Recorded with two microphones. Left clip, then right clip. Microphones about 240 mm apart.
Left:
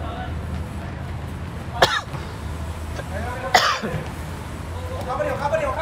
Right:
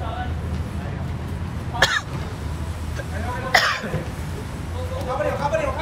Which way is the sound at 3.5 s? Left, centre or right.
Centre.